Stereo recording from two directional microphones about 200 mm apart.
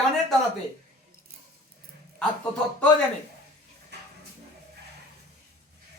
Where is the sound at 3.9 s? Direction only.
55° right (ahead or behind).